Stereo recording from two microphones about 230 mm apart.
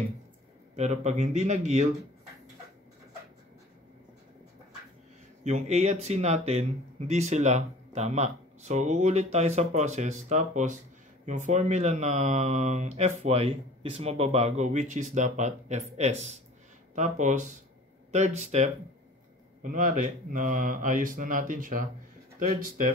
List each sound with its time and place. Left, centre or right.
0.7 s speech: right
5.4 s speech: right